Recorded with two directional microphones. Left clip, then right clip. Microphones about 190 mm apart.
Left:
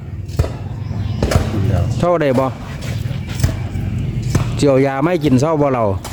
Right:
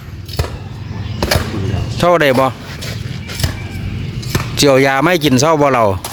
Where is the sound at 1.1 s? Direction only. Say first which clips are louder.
Right 3 dB; 40° right (ahead or behind).